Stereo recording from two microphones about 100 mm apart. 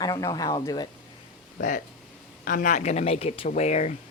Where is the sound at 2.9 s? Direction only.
85° left.